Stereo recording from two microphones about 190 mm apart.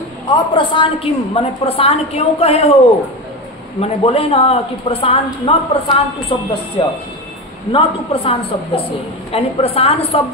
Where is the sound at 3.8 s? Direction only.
30° left (ahead or behind).